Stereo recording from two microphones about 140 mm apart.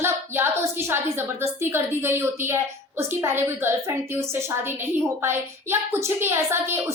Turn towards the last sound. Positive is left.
turn(degrees=-20)  # may be behind; listen again after turning